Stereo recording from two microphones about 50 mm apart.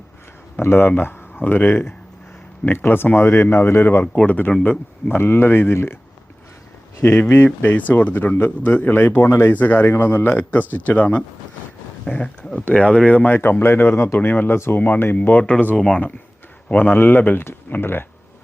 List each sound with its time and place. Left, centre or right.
0.6 s a man's voice: left
4.3 s speech: left
5.1 s a man's voice: left
7.0 s a man's voice: left
9.5 s a man's voice: left
10.5 s speech: left
13.4 s speech: left
14.2 s speech: left
15.4 s speech: left
16.6 s a man's voice: left